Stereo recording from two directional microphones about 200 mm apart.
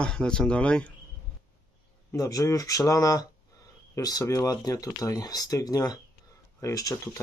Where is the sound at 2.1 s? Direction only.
15° left (ahead or behind).